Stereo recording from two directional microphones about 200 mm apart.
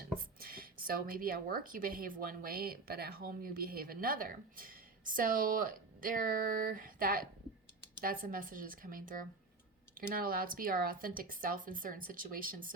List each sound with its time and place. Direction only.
0.0 s speech: 45° right (ahead or behind)